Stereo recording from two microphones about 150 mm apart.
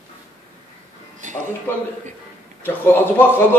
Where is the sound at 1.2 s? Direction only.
60° right (ahead or behind).